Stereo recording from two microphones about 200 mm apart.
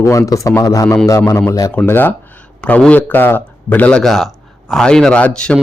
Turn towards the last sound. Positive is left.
turn(degrees=5)  # may be behind; listen again after turning